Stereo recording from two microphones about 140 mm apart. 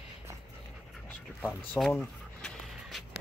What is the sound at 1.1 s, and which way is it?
Speech, 10° left (ahead or behind).